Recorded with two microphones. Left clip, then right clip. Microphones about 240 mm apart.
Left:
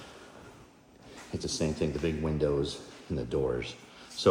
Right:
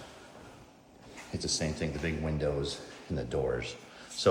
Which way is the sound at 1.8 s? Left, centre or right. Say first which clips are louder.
Left 3 dB; right.